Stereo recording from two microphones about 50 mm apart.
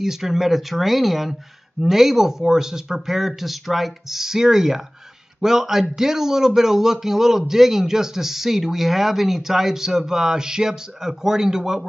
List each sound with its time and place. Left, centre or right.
0.0 s speech: centre